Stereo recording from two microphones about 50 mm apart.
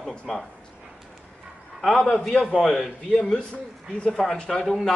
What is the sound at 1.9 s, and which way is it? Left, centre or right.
Speech, centre.